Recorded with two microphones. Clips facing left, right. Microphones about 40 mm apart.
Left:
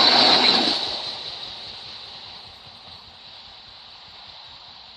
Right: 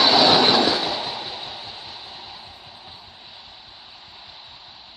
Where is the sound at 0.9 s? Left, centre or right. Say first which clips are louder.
Right 4 dB; right.